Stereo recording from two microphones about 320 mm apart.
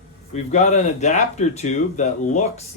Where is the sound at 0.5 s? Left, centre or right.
Left.